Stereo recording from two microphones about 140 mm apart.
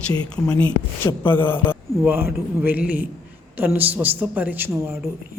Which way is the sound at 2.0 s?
15° right (ahead or behind).